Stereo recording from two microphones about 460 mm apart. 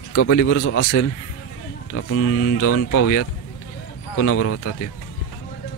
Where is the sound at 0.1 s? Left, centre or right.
Left.